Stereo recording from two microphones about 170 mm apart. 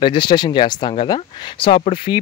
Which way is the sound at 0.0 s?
30° left (ahead or behind).